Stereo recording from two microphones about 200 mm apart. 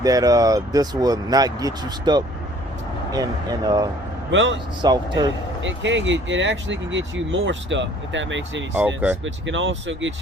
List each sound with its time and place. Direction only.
0.0 s speech: 20° right (ahead or behind)
4.3 s speech: 70° right (ahead or behind)
4.8 s speech: 20° right (ahead or behind)
5.6 s speech: 70° right (ahead or behind)